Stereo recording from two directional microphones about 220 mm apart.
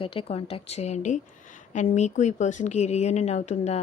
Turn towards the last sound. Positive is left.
turn(degrees=30)  # may be behind; listen again after turning